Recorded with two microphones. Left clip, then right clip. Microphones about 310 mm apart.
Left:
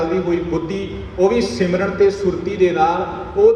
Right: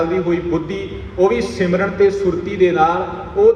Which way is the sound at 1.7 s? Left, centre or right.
Right.